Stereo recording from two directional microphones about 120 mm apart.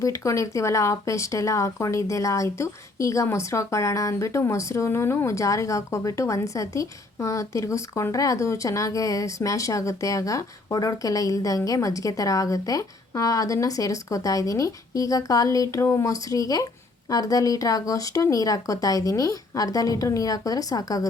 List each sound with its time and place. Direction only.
0.0 s speech: 25° left (ahead or behind)